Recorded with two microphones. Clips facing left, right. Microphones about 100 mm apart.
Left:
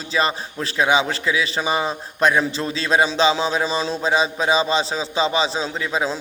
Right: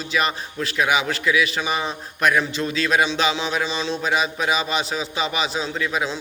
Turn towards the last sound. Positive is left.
turn(degrees=30)  # may be behind; listen again after turning